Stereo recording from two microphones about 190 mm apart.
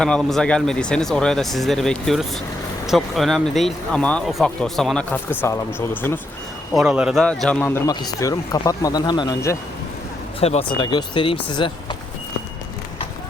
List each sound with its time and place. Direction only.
0.0 s a man's voice: 5° left (ahead or behind)
6.7 s a man's voice: 5° right (ahead or behind); by 9.6 s 20° left (ahead or behind)
10.4 s speech: 30° left (ahead or behind)